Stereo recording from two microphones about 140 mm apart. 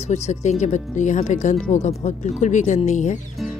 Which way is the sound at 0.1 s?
55° left (ahead or behind).